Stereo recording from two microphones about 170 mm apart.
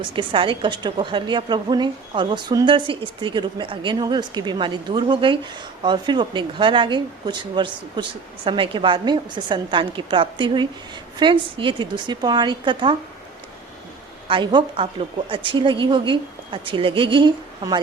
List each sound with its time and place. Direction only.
0.0 s a woman's voice: 30° right (ahead or behind)
14.3 s a woman's voice: 30° right (ahead or behind)